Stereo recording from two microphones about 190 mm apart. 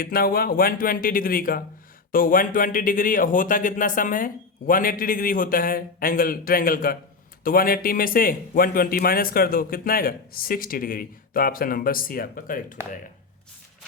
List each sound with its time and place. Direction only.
0.0 s speech: 50° left (ahead or behind)